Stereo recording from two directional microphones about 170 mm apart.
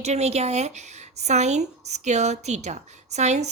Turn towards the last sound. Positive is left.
turn(degrees=-40)  # may be behind; listen again after turning